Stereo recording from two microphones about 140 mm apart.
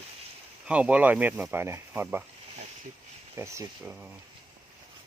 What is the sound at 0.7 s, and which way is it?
Speech, 10° right (ahead or behind).